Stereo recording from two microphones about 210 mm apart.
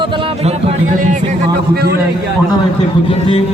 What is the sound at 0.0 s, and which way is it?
Music, 25° right (ahead or behind).